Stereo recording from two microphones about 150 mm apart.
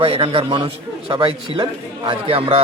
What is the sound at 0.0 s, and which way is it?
Speech, 40° right (ahead or behind).